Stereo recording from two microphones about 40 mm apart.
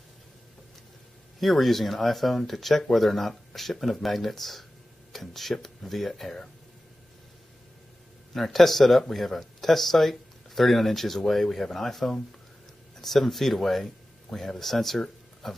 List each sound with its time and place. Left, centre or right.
1.4 s speech: centre
8.3 s speech: centre